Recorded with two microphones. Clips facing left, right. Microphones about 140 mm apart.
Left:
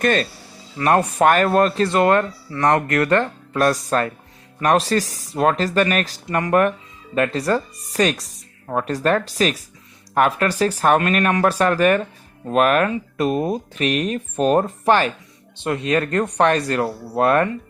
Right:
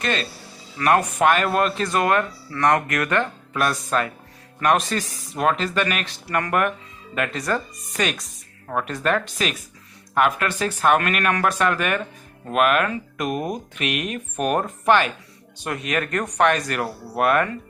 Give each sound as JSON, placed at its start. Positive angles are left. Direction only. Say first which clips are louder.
{"t": 0.0, "sound": "speech", "louder": "left 6 dB", "side_deg": 45}
{"t": 0.8, "sound": "speech", "louder": "left 2 dB", "side_deg": 30}
{"t": 6.2, "sound": "speech", "louder": "left 4 dB", "side_deg": 25}